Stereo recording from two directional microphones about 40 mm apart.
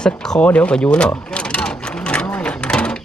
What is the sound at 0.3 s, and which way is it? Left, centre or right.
Sewing machine, left.